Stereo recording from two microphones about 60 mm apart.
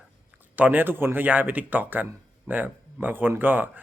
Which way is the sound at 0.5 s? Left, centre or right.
Right.